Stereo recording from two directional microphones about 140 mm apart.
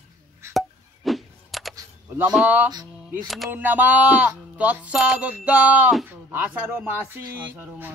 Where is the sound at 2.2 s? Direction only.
10° right (ahead or behind).